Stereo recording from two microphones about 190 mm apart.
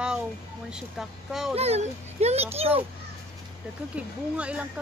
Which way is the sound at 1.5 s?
35° right (ahead or behind).